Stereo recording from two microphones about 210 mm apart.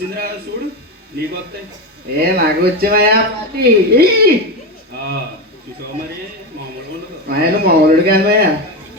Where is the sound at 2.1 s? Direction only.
50° right (ahead or behind).